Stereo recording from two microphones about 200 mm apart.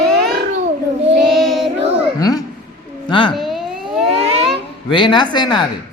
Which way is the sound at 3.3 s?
Centre (ahead or behind).